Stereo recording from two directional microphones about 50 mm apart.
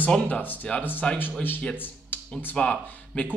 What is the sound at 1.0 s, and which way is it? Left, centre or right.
Speech, left.